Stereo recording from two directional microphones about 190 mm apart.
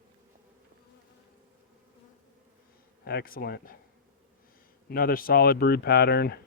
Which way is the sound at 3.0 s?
50° left (ahead or behind).